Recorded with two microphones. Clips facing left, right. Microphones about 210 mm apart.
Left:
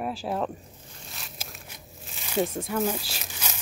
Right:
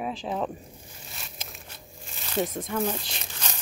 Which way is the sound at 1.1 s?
Centre (ahead or behind).